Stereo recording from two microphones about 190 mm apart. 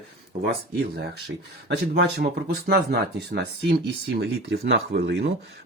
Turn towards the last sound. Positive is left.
turn(degrees=-65)  # may be behind; listen again after turning